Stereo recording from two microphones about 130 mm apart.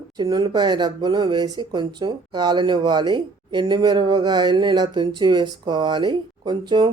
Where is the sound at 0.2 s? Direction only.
35° right (ahead or behind).